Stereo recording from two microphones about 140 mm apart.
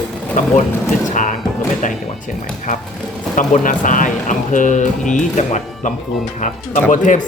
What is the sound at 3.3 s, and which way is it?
Speech, 70° left (ahead or behind).